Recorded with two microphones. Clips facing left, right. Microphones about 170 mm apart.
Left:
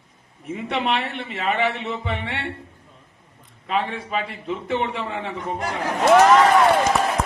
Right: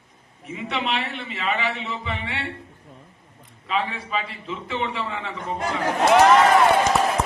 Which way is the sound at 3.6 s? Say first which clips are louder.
Left 2 dB; 55° left (ahead or behind).